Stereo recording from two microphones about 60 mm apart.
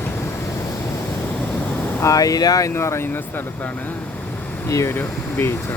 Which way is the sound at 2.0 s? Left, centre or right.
Left.